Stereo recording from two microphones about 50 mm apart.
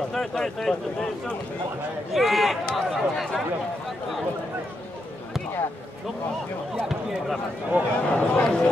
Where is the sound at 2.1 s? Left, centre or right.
Centre.